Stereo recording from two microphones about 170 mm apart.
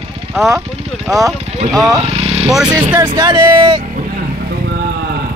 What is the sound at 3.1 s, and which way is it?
Speech, 25° right (ahead or behind).